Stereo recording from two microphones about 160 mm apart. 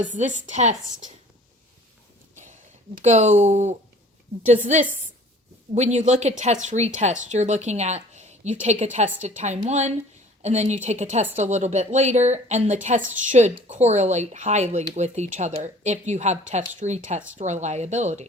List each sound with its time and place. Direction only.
0.0 s speech: 50° right (ahead or behind)
2.3 s a sound: 50° right (ahead or behind)
3.0 s speech: 45° right (ahead or behind)